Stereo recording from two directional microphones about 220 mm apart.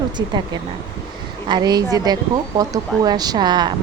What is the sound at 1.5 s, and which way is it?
A woman's voice, 20° right (ahead or behind).